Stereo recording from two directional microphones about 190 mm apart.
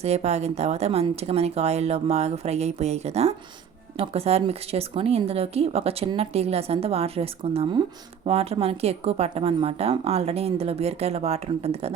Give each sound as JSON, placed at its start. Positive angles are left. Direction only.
{"t": 0.0, "sound": "speech", "side_deg": -35}